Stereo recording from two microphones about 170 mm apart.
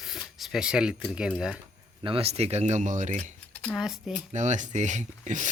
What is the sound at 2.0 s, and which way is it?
Speech, 35° right (ahead or behind).